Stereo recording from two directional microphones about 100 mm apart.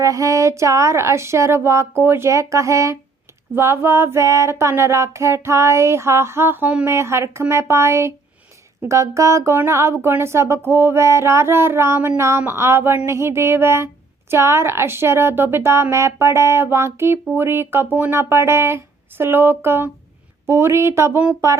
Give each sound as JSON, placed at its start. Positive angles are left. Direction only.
{"t": 0.0, "sound": "a woman's voice", "side_deg": -35}
{"t": 6.8, "sound": "a woman's voice", "side_deg": -30}
{"t": 18.2, "sound": "a woman's voice", "side_deg": -25}